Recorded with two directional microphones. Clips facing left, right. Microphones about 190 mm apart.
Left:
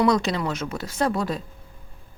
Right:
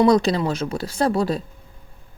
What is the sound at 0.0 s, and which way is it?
A woman's voice, 35° right (ahead or behind).